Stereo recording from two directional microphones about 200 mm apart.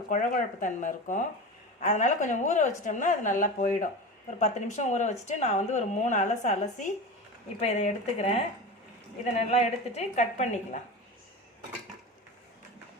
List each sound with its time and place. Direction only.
0.1 s a woman's voice: 40° left (ahead or behind)